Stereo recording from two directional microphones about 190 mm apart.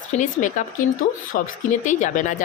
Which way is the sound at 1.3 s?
45° left (ahead or behind).